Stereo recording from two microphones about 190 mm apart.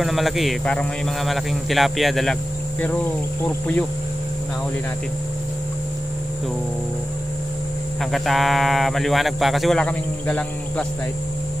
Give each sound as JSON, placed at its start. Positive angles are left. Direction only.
{"t": 0.0, "sound": "speech", "side_deg": 0}
{"t": 3.4, "sound": "insect", "side_deg": 10}
{"t": 8.0, "sound": "speech", "side_deg": 0}